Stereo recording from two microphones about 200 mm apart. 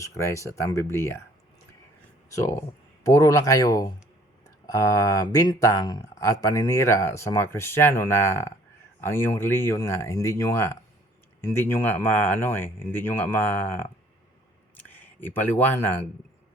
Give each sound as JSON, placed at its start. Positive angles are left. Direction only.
{"t": 0.0, "sound": "speech", "side_deg": 15}
{"t": 2.3, "sound": "speech", "side_deg": 15}